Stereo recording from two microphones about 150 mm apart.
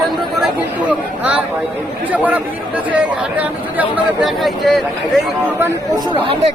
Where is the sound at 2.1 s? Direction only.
10° right (ahead or behind).